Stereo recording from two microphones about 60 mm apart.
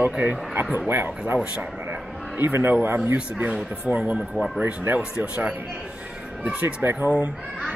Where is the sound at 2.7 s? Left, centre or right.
Right.